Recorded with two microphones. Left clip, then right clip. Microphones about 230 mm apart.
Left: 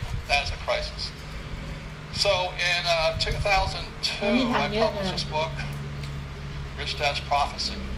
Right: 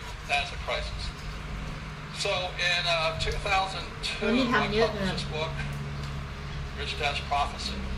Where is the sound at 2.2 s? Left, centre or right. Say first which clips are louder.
Left 5 dB; centre.